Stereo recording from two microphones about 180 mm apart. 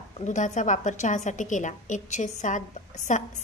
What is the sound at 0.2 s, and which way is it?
A woman's voice, 45° left (ahead or behind).